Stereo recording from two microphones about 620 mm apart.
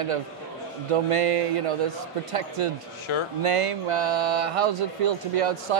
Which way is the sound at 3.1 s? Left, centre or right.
Left.